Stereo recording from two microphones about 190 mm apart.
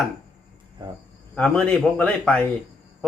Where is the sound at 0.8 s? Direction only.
25° right (ahead or behind).